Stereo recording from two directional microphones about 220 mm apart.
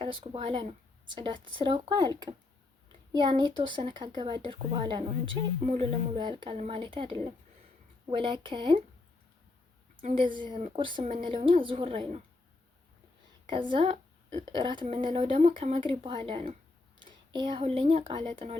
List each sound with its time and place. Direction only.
0.0 s speech: 25° right (ahead or behind)
10.7 s speech: 20° right (ahead or behind)
13.5 s speech: 20° right (ahead or behind)